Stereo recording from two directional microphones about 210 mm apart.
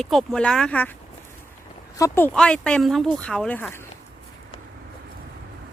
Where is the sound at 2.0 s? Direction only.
10° left (ahead or behind).